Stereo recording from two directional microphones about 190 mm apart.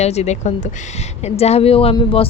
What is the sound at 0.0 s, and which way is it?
A woman's voice, 35° left (ahead or behind).